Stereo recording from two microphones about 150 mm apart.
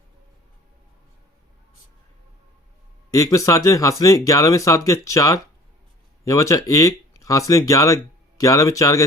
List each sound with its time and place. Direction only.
3.1 s speech: 20° left (ahead or behind)